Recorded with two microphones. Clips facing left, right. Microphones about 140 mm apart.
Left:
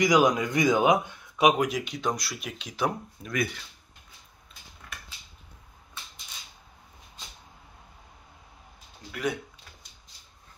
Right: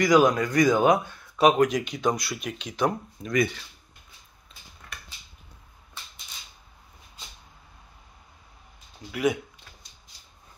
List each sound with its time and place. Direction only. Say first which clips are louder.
0.0 s speech: right 2 dB; 15° left (ahead or behind)
1.0 s a sound: right 2 dB; 15° left (ahead or behind)
1.5 s speech: right 4 dB; 5° left (ahead or behind)
9.1 s speech: right 5 dB; 10° right (ahead or behind)